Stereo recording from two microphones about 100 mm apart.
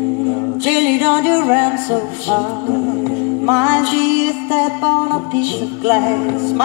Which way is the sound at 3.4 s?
20° right (ahead or behind).